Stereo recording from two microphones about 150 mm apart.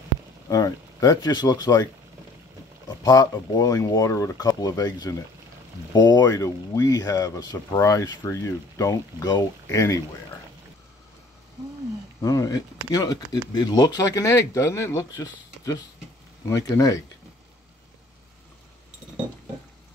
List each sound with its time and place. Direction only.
0.5 s speech: 25° left (ahead or behind)
2.9 s speech: 25° left (ahead or behind)
12.2 s speech: 25° left (ahead or behind)